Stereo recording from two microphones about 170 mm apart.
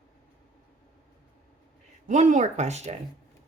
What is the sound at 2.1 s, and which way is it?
Speech, 45° right (ahead or behind).